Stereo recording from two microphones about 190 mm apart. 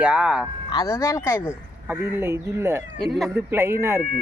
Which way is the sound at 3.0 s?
5° left (ahead or behind).